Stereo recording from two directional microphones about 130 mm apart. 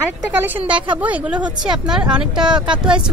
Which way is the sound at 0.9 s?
10° right (ahead or behind).